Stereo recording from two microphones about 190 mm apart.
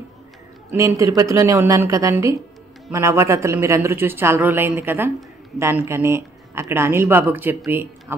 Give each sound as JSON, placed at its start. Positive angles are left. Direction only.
{"t": 0.7, "sound": "speech", "side_deg": -15}